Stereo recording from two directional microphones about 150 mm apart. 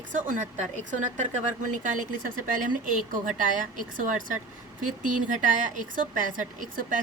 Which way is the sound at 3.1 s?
60° right (ahead or behind).